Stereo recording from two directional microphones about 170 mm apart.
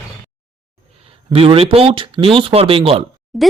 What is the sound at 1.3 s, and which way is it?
Speech, 35° right (ahead or behind).